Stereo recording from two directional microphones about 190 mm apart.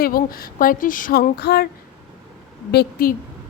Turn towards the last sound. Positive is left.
turn(degrees=55)  # may be behind; listen again after turning